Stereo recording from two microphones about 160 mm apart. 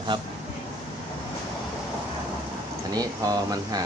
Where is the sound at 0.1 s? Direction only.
30° right (ahead or behind).